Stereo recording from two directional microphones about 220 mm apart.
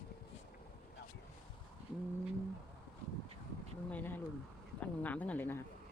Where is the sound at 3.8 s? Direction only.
10° left (ahead or behind).